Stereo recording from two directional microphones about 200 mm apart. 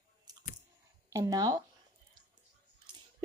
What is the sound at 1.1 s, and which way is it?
Speech, 20° right (ahead or behind).